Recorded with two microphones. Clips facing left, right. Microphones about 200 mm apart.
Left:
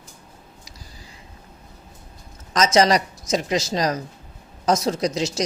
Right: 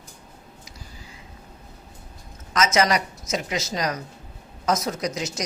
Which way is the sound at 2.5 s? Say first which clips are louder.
Left 4 dB; 30° left (ahead or behind).